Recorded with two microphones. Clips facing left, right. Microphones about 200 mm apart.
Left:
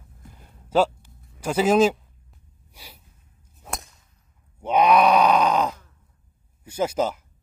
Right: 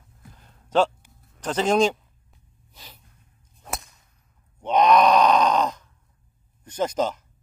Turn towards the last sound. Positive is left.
turn(degrees=10)  # may be behind; listen again after turning